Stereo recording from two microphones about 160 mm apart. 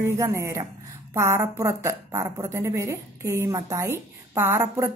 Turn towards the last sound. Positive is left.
turn(degrees=-20)  # may be behind; listen again after turning